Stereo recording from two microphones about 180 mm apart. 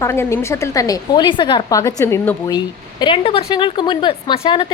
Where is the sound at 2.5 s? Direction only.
25° left (ahead or behind).